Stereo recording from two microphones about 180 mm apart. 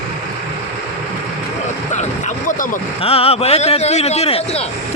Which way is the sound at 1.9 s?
40° left (ahead or behind).